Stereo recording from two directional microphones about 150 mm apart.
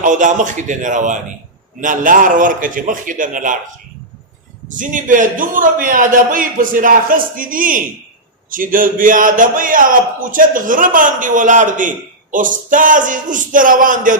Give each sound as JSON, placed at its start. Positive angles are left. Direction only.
{"t": 0.0, "sound": "a man's voice", "side_deg": -60}
{"t": 4.7, "sound": "a man's voice", "side_deg": -60}